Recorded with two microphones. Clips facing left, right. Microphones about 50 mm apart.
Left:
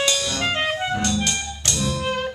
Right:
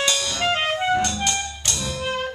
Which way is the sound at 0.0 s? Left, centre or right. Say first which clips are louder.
Even; centre.